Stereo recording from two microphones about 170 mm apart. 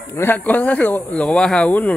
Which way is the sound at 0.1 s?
10° left (ahead or behind).